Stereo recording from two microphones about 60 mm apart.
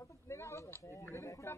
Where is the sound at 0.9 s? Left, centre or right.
Left.